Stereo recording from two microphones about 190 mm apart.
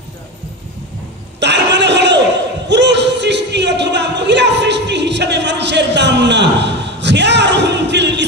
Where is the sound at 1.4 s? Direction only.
65° right (ahead or behind).